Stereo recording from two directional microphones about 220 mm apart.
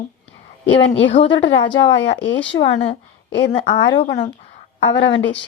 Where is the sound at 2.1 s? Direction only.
55° left (ahead or behind).